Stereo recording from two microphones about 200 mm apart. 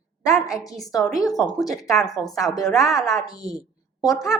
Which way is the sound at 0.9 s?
Centre (ahead or behind).